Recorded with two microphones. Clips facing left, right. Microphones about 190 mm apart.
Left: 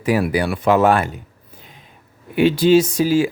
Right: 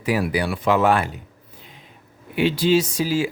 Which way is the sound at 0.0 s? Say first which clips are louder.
Left 4 dB; 50° left (ahead or behind).